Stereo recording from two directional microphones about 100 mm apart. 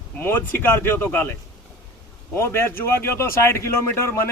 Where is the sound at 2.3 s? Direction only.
25° left (ahead or behind).